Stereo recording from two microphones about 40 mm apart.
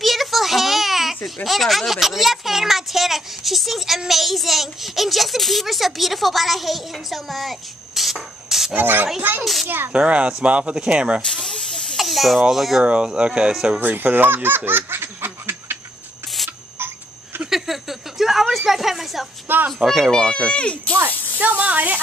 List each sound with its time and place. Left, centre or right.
0.0 s a sound: centre
8.7 s speech: right
9.4 s speech: centre
9.9 s speech: right
11.2 s hiss: centre
12.0 s snake: centre
12.4 s speech: centre
12.8 s speech: right
13.8 s speech: right
17.5 s a sound: centre
18.7 s a woman's voice: centre
19.4 s a child's voice: right
20.1 s speech: centre
20.9 s speech: right